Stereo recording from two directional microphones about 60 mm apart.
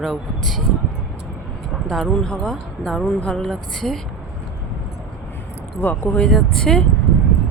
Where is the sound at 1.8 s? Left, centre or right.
Centre.